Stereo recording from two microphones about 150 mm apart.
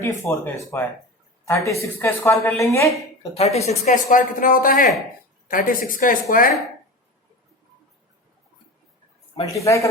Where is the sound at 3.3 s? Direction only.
45° left (ahead or behind); by 6.5 s 65° left (ahead or behind).